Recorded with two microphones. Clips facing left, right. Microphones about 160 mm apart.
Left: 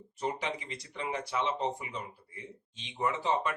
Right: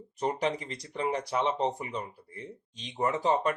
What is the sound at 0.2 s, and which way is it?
A man's voice, 40° right (ahead or behind).